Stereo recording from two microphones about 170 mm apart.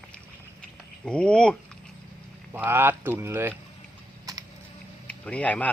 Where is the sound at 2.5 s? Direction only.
10° right (ahead or behind).